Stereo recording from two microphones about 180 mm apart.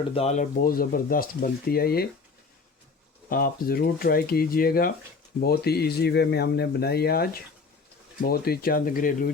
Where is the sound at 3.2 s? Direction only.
55° left (ahead or behind).